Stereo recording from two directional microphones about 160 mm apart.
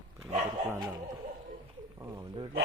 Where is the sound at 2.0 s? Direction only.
20° right (ahead or behind).